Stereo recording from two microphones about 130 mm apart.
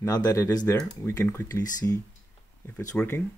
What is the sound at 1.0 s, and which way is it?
Speech, 20° left (ahead or behind).